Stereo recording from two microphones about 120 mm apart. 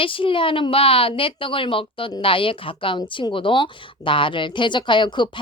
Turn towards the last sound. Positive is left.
turn(degrees=40)  # may be behind; listen again after turning